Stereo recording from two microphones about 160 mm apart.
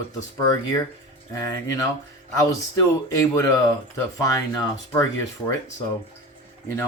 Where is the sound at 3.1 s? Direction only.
20° left (ahead or behind).